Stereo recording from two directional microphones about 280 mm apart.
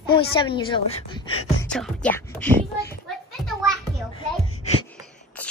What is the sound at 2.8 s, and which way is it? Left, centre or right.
Children playing, centre.